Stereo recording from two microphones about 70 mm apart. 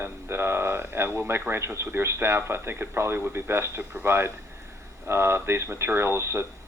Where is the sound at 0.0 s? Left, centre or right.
Right.